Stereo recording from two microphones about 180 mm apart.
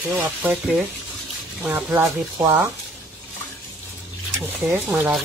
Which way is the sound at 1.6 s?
10° right (ahead or behind).